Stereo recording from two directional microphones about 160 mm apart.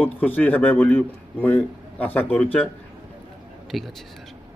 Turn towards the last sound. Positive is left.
turn(degrees=0)  # may be behind; listen again after turning